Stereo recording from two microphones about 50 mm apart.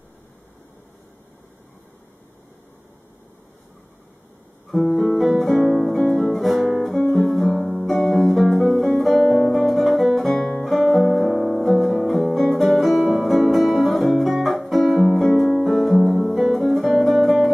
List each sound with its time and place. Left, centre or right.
4.9 s guitar: centre
5.4 s music: centre
6.8 s guitar: centre
7.2 s music: centre
10.2 s music: centre
10.6 s guitar: centre
11.1 s music: centre